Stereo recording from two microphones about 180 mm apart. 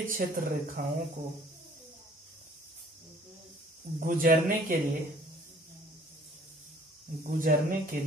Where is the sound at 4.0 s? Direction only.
50° right (ahead or behind).